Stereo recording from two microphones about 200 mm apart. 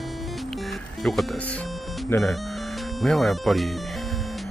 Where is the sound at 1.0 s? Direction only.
Centre (ahead or behind).